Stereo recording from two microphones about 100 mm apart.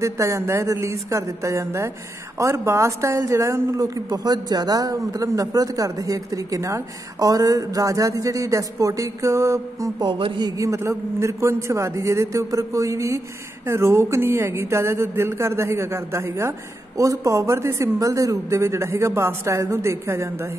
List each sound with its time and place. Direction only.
0.0 s speech: 30° right (ahead or behind)
10.0 s speech: 60° right (ahead or behind)
10.4 s speech: 30° right (ahead or behind)